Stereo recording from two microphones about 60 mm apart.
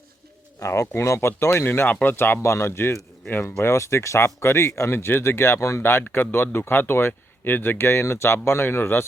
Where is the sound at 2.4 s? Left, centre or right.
Left.